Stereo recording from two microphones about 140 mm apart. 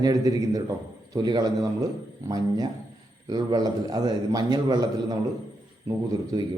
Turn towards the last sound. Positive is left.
turn(degrees=-25)  # may be behind; listen again after turning